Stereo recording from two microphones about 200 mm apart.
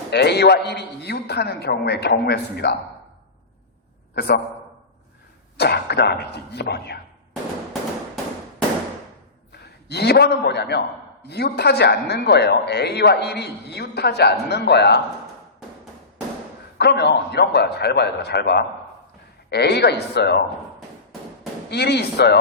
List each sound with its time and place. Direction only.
0.1 s a man's voice: 55° left (ahead or behind)
4.1 s a man's voice: 55° left (ahead or behind)
5.5 s a man's voice: 55° left (ahead or behind)
7.7 s a sound: centre (ahead or behind)
9.5 s a man's voice: 55° left (ahead or behind)
16.7 s a man's voice: 55° left (ahead or behind)
21.7 s a man's voice: 55° left (ahead or behind)